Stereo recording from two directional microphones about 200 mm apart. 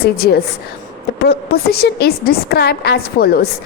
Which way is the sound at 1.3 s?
50° left (ahead or behind).